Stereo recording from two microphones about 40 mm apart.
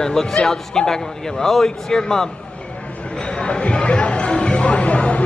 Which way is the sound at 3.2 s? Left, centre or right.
Left.